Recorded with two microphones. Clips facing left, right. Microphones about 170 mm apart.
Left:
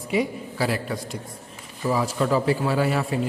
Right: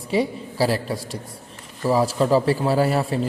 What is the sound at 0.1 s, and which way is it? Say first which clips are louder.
A man's voice: right 2 dB; 35° right (ahead or behind).